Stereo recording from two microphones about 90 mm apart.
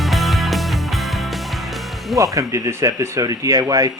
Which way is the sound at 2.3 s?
35° right (ahead or behind).